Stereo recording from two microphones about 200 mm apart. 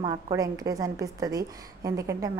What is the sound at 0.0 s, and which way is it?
A woman's voice, 20° right (ahead or behind).